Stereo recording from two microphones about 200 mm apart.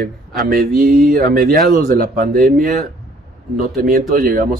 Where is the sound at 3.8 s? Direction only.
45° right (ahead or behind).